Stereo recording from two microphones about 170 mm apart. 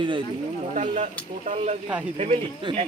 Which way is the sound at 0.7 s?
45° right (ahead or behind).